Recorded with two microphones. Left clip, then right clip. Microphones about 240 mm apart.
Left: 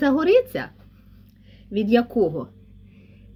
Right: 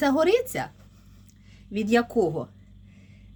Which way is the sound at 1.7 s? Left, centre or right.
Right.